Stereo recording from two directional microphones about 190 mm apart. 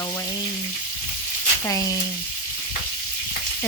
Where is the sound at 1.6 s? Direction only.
15° left (ahead or behind).